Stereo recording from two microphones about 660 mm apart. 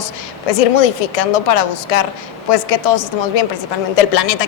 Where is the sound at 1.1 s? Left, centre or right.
Left.